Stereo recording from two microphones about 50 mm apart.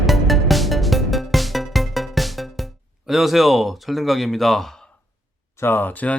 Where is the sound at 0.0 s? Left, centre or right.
Centre.